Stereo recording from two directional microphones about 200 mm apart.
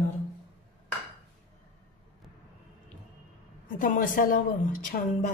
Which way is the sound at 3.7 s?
45° left (ahead or behind).